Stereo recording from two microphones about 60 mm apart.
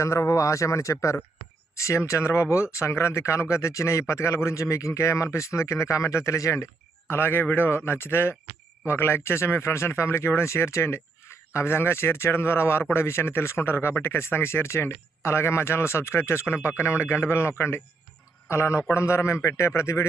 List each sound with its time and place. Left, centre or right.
0.0 s speech: left
7.1 s speech: left